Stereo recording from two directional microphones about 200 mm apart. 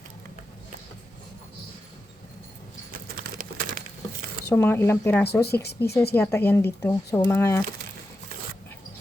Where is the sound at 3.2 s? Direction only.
45° right (ahead or behind).